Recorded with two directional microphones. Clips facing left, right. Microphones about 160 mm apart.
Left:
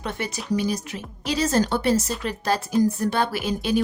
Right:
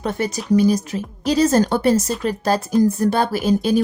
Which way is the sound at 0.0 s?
40° right (ahead or behind).